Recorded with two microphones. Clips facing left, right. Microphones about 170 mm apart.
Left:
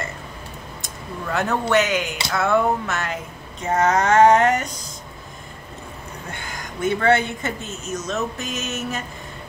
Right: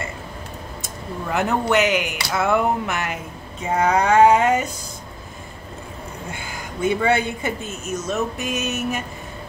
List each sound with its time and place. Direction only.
1.3 s speech: 15° right (ahead or behind)
6.4 s speech: 10° right (ahead or behind)